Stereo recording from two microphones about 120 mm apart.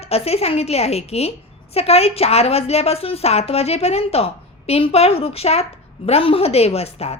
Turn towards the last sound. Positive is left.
turn(degrees=60)  # may be behind; listen again after turning